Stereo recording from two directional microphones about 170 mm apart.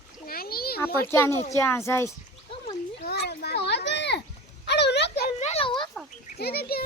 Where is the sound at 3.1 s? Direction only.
75° left (ahead or behind); by 4.2 s 90° left.